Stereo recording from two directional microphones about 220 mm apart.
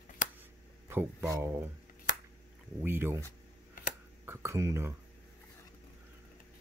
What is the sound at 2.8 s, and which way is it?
Speech, 10° right (ahead or behind).